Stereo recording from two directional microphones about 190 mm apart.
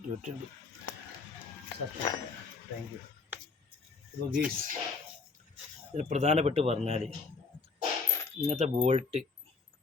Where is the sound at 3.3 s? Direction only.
10° right (ahead or behind).